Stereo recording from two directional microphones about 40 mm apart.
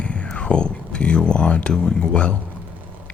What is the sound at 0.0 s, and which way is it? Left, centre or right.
Whispering, left.